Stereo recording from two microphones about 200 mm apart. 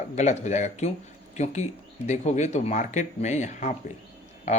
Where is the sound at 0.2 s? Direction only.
35° left (ahead or behind).